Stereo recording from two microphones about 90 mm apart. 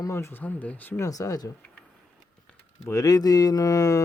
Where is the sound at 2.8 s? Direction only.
40° left (ahead or behind).